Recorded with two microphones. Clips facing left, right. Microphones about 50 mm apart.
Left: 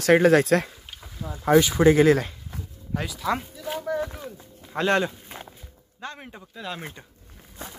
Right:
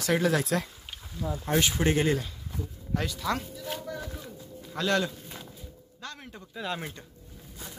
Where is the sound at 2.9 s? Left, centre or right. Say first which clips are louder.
Left 2 dB; centre.